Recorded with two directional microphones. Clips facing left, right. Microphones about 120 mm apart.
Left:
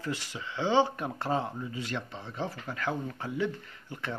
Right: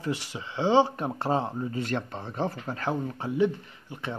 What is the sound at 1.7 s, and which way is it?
Speech, 45° right (ahead or behind).